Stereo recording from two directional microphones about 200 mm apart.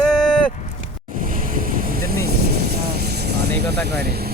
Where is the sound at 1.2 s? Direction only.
45° right (ahead or behind).